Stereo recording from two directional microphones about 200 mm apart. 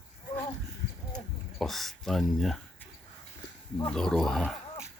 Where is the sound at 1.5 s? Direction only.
Centre (ahead or behind).